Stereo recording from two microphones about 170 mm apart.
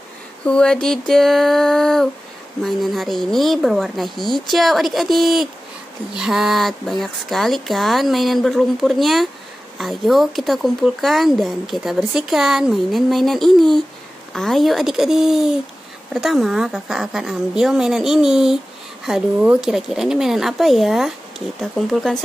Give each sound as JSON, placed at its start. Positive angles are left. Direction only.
{"t": 0.5, "sound": "speech", "side_deg": 5}